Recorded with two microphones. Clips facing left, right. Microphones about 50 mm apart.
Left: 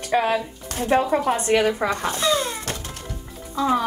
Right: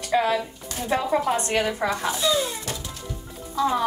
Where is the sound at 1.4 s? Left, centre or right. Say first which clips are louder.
Left 5 dB; left.